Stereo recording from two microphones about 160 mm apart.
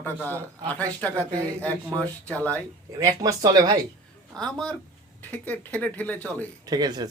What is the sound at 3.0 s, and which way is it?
Speech, 20° right (ahead or behind).